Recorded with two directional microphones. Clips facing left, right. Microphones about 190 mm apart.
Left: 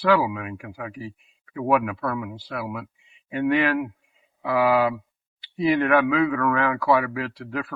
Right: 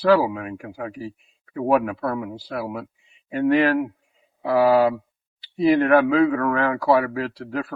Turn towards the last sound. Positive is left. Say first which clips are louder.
# right 3 dB
turn(degrees=-40)  # may be behind; listen again after turning